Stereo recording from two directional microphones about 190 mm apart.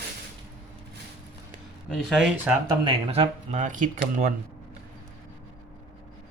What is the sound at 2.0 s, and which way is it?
Speech, centre (ahead or behind).